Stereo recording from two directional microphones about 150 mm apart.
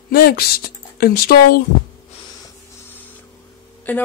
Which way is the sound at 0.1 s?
90° left.